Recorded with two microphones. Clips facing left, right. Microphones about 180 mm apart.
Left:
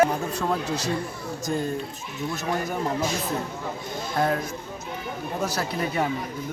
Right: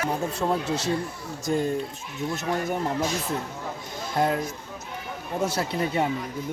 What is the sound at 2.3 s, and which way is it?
Speech, 25° right (ahead or behind).